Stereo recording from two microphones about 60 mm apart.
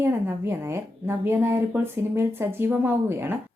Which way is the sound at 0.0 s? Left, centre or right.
Right.